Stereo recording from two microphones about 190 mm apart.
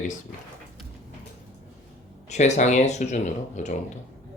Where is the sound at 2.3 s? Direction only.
35° left (ahead or behind).